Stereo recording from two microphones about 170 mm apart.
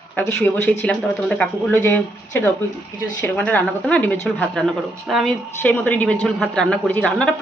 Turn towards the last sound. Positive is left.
turn(degrees=5)  # may be behind; listen again after turning